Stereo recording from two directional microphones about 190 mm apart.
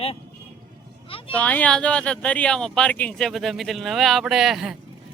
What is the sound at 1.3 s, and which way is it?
Speech, 10° left (ahead or behind).